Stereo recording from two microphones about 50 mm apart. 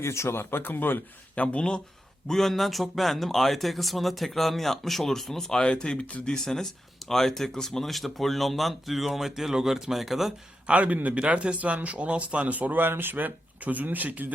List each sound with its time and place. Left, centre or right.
0.0 s speech: left
1.4 s speech: left
2.2 s speech: centre; by 6.3 s left
6.3 s speech: centre
10.7 s speech: right